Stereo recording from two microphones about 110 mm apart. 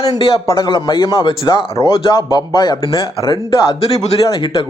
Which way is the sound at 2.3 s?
40° left (ahead or behind).